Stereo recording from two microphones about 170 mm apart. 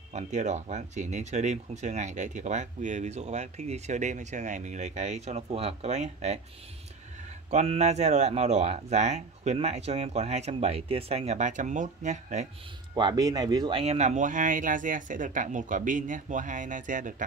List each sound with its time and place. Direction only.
0.1 s speech: 45° right (ahead or behind)
7.5 s speech: 40° right (ahead or behind)
12.9 s speech: 25° right (ahead or behind); by 17.1 s 50° right (ahead or behind)